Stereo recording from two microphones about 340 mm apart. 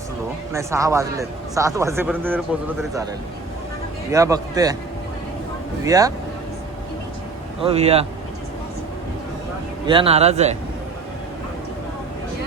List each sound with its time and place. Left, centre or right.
0.5 s a man's voice: centre
4.1 s a man's voice: centre
5.8 s a man's voice: centre
7.6 s a man's voice: centre
9.8 s a man's voice: centre